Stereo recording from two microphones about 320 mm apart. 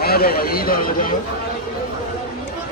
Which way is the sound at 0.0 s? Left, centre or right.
Left.